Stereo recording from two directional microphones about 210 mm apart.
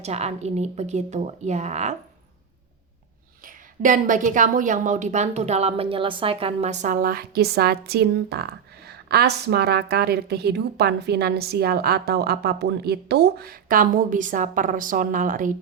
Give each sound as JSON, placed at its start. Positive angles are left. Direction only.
{"t": 0.0, "sound": "speech", "side_deg": -30}
{"t": 3.4, "sound": "a woman's voice", "side_deg": -40}